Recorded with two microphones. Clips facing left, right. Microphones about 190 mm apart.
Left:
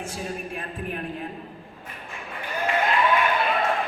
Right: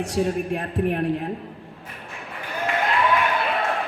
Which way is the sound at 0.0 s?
75° right (ahead or behind).